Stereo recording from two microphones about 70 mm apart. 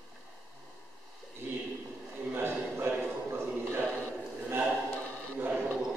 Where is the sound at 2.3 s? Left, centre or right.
Right.